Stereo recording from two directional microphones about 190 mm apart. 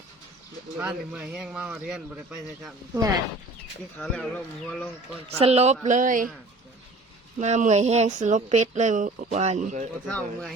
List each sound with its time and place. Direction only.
0.8 s speech: 5° right (ahead or behind)
2.9 s speech: 20° right (ahead or behind)
4.0 s speech: 5° left (ahead or behind)
5.4 s speech: 35° right (ahead or behind)
7.3 s speech: 40° right (ahead or behind)
10.1 s speech: 5° left (ahead or behind)